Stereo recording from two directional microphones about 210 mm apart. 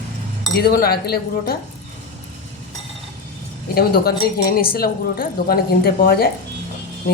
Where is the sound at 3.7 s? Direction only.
45° left (ahead or behind).